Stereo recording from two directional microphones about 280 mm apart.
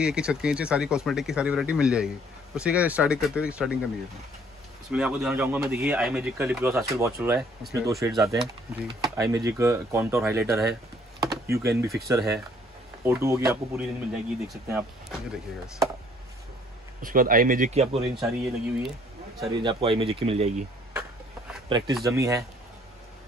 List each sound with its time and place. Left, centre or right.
0.0 s speech: centre
4.9 s speech: centre
17.0 s speech: right
18.1 s speech: centre
19.6 s speech: centre
21.6 s speech: centre